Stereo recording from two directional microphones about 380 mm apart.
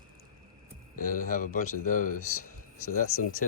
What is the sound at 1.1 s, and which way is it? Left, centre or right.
Speech, left.